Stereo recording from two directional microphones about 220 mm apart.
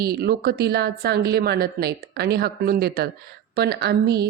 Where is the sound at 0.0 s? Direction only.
45° right (ahead or behind).